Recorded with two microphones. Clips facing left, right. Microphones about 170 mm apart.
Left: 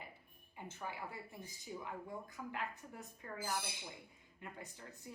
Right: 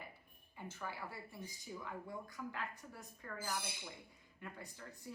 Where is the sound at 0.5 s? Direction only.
20° left (ahead or behind).